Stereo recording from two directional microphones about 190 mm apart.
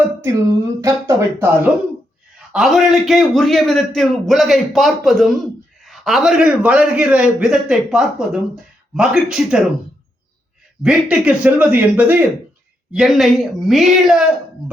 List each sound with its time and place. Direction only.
0.8 s speech: 15° right (ahead or behind)
2.5 s a man's voice: centre (ahead or behind)
10.8 s a man's voice: 5° right (ahead or behind)